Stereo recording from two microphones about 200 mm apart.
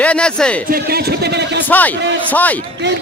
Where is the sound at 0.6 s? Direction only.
50° right (ahead or behind).